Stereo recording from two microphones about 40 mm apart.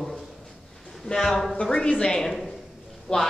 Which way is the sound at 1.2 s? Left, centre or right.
Centre.